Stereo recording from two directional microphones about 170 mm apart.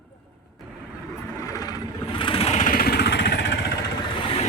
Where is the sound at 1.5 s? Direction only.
20° left (ahead or behind); by 3.6 s 85° left.